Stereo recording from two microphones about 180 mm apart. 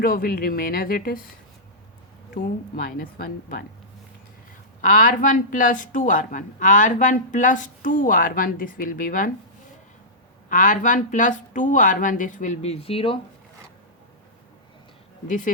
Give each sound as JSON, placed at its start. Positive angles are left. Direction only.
{"t": 0.0, "sound": "a woman's voice", "side_deg": 55}
{"t": 2.3, "sound": "a woman's voice", "side_deg": 55}
{"t": 4.8, "sound": "a woman's voice", "side_deg": 45}
{"t": 10.5, "sound": "a woman's voice", "side_deg": 45}
{"t": 15.3, "sound": "a woman's voice", "side_deg": 45}